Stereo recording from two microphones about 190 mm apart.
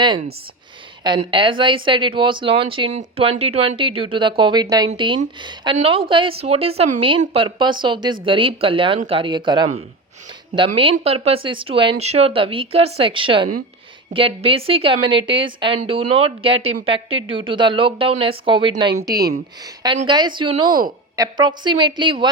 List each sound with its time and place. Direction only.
0.0 s a woman's voice: 25° right (ahead or behind)